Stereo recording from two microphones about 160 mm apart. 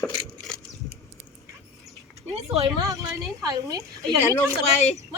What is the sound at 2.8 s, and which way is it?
A woman's voice, 20° right (ahead or behind).